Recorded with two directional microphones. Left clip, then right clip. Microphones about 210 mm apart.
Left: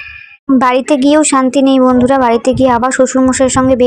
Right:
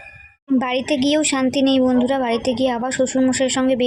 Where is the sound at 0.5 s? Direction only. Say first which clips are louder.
Left 10 dB; 20° left (ahead or behind).